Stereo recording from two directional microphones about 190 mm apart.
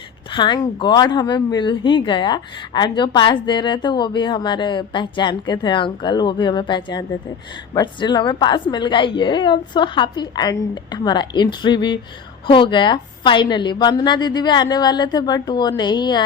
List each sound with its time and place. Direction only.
0.3 s a woman's voice: 25° left (ahead or behind)